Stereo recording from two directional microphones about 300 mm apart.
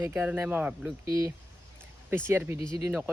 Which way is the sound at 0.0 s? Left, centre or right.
Centre.